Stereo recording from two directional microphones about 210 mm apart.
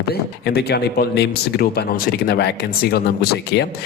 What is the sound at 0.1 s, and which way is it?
Speech, 50° left (ahead or behind).